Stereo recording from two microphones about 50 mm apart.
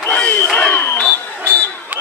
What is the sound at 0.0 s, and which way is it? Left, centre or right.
Crowd, left.